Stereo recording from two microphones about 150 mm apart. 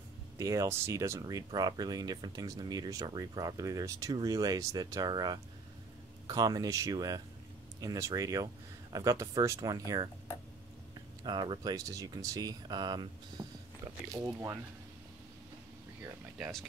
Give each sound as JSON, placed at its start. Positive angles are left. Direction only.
{"t": 0.4, "sound": "speech", "side_deg": -20}
{"t": 11.2, "sound": "speech", "side_deg": -30}